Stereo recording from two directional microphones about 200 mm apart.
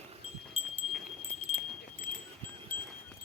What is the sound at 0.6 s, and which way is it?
Wind chime, 30° left (ahead or behind).